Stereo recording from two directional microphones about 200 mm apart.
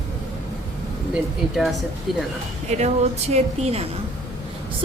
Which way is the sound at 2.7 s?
35° right (ahead or behind).